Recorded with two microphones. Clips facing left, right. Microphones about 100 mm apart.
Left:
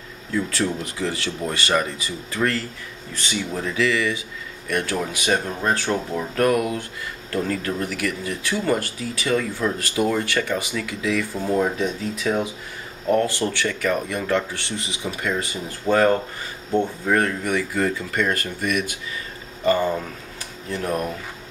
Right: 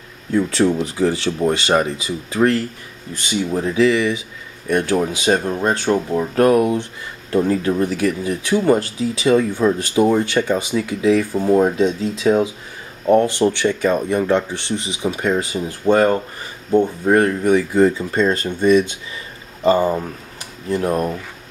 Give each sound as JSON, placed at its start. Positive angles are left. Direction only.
{"t": 0.5, "sound": "speech", "side_deg": -25}
{"t": 3.6, "sound": "speech", "side_deg": -25}
{"t": 6.3, "sound": "speech", "side_deg": -25}
{"t": 11.3, "sound": "speech", "side_deg": -20}